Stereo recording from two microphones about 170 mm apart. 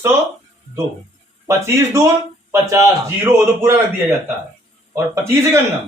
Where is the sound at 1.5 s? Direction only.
15° right (ahead or behind).